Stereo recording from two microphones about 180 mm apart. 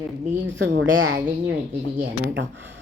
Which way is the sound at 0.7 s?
90° right.